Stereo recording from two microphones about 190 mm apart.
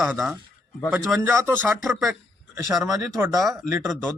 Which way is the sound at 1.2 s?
15° right (ahead or behind).